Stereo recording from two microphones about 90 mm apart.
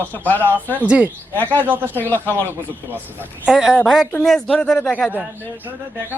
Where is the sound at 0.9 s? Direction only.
15° right (ahead or behind).